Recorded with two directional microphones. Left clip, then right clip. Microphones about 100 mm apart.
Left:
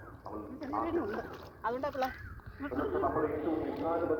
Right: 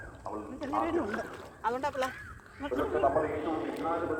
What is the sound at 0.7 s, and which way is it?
Speech, 30° right (ahead or behind).